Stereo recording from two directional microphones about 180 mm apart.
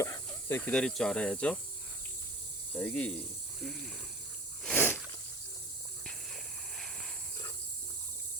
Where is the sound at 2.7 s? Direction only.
10° left (ahead or behind).